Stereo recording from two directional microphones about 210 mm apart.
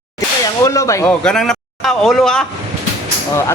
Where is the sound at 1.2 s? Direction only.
5° left (ahead or behind).